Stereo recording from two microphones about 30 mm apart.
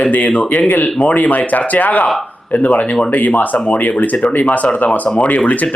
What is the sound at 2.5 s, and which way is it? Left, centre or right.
Speech, left.